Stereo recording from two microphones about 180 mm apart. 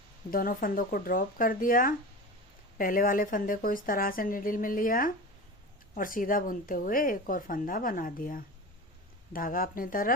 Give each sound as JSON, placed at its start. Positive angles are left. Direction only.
{"t": 0.3, "sound": "speech", "side_deg": 50}